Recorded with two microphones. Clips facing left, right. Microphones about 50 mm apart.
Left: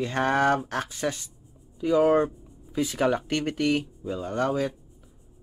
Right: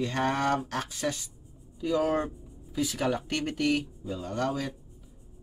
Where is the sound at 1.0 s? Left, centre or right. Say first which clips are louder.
Left 2 dB; left.